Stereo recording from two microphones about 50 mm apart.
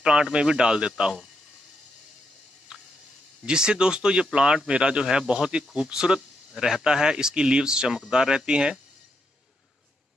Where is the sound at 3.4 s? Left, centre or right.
Centre.